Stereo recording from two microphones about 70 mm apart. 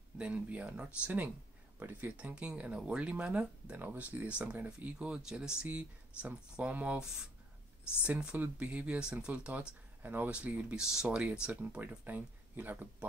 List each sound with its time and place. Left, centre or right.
0.2 s speech: centre
2.1 s speech: centre
8.0 s speech: centre
10.0 s speech: right
10.3 s speech: centre